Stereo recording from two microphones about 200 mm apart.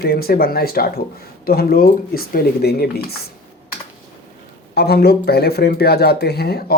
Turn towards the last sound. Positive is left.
turn(degrees=50)  # may be behind; listen again after turning